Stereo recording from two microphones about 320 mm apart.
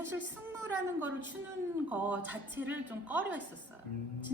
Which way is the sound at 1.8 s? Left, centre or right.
Centre.